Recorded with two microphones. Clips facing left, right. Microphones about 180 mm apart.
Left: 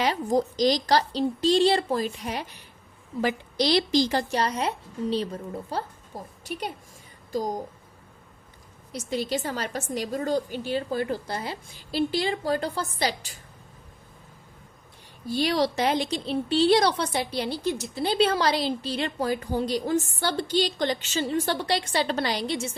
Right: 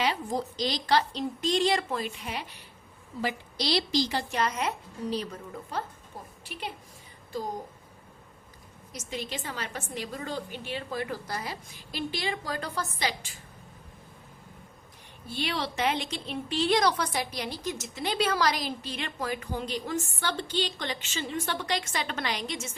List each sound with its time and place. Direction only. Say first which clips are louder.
0.0 s a woman's voice: left 5 dB; 45° left (ahead or behind)
3.2 s a woman's voice: left 7 dB; 55° left (ahead or behind); by 5.8 s 30° left (ahead or behind)
6.4 s a woman's voice: left 6 dB; 45° left (ahead or behind)
8.9 s a woman's voice: left 8 dB; 35° left (ahead or behind)
15.3 s a woman's voice: left 8 dB; 40° left (ahead or behind)